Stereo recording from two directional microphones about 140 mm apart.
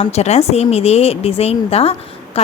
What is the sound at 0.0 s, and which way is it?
A woman's voice, 50° left (ahead or behind).